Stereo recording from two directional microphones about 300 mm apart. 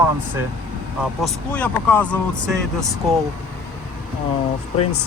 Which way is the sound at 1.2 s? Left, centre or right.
Centre.